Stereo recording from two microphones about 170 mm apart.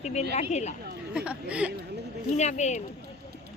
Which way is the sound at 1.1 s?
5° right (ahead or behind).